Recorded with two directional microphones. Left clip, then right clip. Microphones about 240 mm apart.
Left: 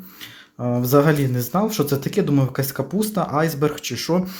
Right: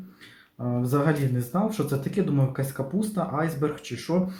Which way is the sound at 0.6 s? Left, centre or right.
Left.